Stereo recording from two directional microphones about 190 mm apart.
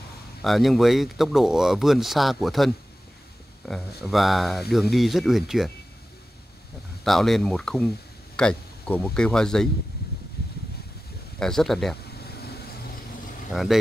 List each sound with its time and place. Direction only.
0.4 s speech: centre (ahead or behind)
4.0 s speech: centre (ahead or behind)
7.1 s speech: centre (ahead or behind)
11.3 s speech: 5° left (ahead or behind)
12.1 s vehicle: 55° left (ahead or behind)
13.5 s speech: centre (ahead or behind)